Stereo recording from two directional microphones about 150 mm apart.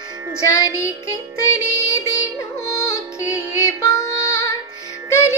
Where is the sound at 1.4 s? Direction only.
20° left (ahead or behind).